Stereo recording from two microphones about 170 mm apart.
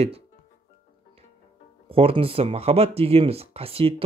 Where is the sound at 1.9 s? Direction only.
35° right (ahead or behind).